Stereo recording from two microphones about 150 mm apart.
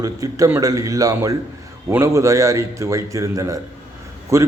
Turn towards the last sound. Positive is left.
turn(degrees=-20)  # may be behind; listen again after turning